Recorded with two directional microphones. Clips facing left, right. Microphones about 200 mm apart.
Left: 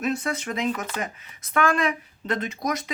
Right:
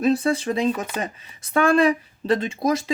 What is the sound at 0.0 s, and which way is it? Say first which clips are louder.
Speech: right 7 dB; 30° right (ahead or behind).